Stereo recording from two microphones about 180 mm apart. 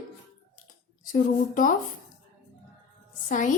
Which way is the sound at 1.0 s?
50° left (ahead or behind).